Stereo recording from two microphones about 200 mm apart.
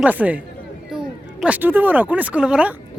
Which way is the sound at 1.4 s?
10° right (ahead or behind).